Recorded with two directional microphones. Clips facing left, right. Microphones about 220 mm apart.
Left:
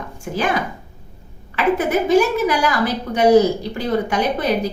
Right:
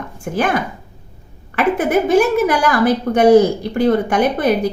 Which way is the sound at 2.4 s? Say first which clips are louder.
Right 4 dB; 55° right (ahead or behind).